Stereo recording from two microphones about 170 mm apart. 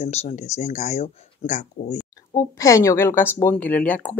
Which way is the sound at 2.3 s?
20° left (ahead or behind).